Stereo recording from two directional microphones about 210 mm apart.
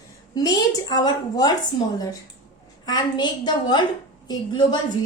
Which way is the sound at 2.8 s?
20° left (ahead or behind).